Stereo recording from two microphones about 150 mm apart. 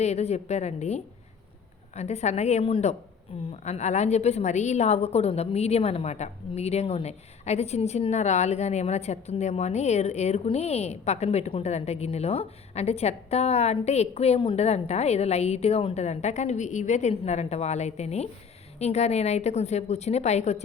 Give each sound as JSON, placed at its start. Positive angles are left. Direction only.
{"t": 0.0, "sound": "a woman's voice", "side_deg": 45}